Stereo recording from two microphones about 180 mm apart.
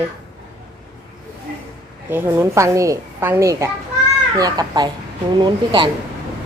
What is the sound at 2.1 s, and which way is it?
A child's voice, 15° right (ahead or behind).